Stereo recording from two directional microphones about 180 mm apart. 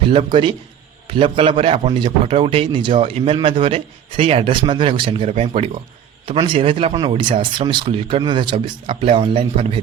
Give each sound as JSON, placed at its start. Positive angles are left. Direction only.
{"t": 0.0, "sound": "a man's voice", "side_deg": -30}